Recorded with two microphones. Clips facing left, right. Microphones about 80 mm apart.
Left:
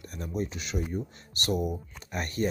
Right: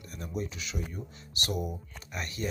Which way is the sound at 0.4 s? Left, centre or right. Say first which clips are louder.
Left 4 dB; left.